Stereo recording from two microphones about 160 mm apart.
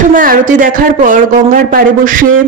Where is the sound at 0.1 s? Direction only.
60° right (ahead or behind).